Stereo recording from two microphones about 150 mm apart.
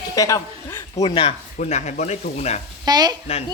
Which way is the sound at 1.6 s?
50° left (ahead or behind).